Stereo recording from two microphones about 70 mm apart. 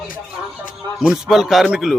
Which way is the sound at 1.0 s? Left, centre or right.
Centre.